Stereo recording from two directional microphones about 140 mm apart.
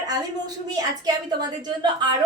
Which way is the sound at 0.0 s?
30° right (ahead or behind).